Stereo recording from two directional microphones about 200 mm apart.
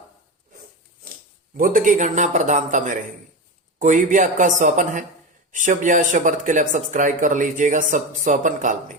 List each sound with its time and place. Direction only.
1.5 s speech: 45° right (ahead or behind)